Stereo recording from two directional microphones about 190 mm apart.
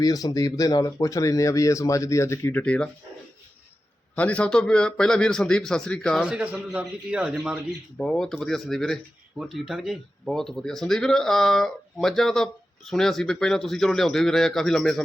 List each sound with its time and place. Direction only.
0.0 s speech: 20° left (ahead or behind)
4.1 s a man's voice: 5° left (ahead or behind)
7.9 s a man's voice: 5° left (ahead or behind)